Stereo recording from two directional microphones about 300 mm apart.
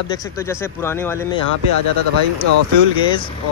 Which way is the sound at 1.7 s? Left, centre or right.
Right.